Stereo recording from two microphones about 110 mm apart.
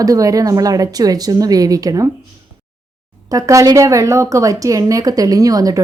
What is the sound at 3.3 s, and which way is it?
Speech, 30° right (ahead or behind).